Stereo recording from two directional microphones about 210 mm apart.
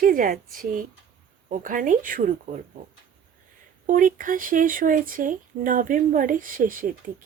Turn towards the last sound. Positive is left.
turn(degrees=-40)  # may be behind; listen again after turning